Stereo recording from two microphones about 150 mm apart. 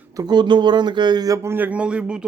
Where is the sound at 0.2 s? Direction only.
30° right (ahead or behind).